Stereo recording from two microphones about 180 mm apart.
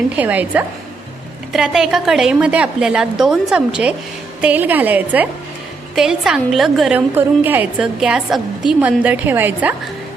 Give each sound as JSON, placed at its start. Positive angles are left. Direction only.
{"t": 0.2, "sound": "a woman's voice", "side_deg": -10}